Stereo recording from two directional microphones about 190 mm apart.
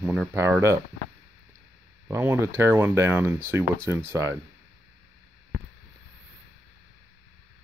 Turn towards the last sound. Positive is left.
turn(degrees=-60)  # may be behind; listen again after turning